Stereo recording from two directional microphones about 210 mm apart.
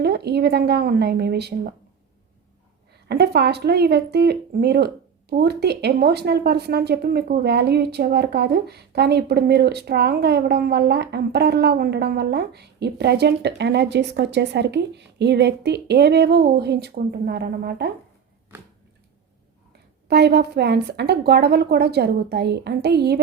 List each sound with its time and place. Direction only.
0.0 s a woman's voice: 50° right (ahead or behind)
3.1 s a woman's voice: 50° right (ahead or behind)
20.1 s a woman's voice: 50° right (ahead or behind)